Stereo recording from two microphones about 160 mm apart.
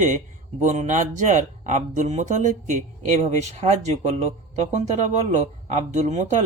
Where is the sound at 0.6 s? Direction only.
50° right (ahead or behind).